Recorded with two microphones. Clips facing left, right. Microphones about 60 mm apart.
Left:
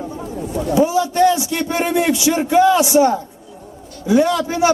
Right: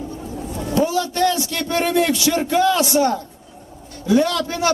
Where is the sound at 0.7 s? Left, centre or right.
Centre.